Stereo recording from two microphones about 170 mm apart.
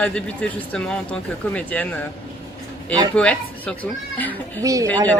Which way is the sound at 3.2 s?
5° left (ahead or behind).